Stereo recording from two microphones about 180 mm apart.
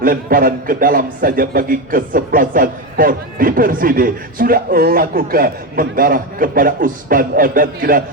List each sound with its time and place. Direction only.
0.0 s a man's voice: 50° right (ahead or behind)